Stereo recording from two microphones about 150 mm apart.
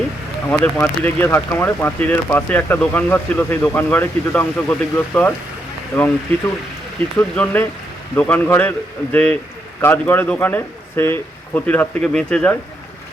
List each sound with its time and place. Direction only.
0.4 s speech: 15° left (ahead or behind)
7.2 s speech: 15° left (ahead or behind)